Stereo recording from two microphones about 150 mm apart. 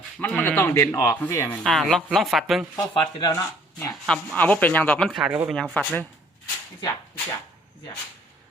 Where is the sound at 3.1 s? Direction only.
30° left (ahead or behind).